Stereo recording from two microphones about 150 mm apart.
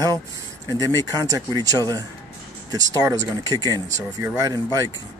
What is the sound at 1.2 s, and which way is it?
Speech, 25° right (ahead or behind).